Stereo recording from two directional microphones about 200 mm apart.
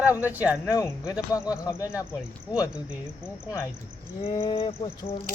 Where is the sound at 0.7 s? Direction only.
15° left (ahead or behind).